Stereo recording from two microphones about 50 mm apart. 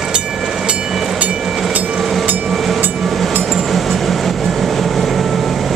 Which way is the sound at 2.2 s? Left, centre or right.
Right.